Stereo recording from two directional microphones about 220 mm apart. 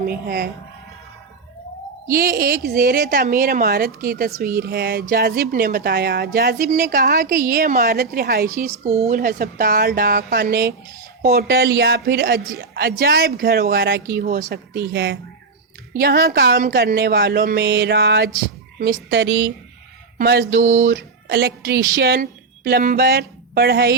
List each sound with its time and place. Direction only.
0.0 s speech: 45° right (ahead or behind)
2.0 s a woman's voice: 40° right (ahead or behind)
8.7 s speech: 30° right (ahead or behind)
9.1 s speech: 40° right (ahead or behind)
20.1 s speech: 45° right (ahead or behind)
20.7 s a woman's voice: 60° right (ahead or behind)